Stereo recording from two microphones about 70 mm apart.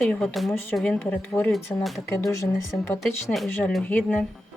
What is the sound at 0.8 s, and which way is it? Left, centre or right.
Speech, left.